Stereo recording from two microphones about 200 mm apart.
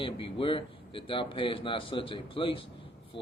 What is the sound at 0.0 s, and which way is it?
Speech, 25° left (ahead or behind).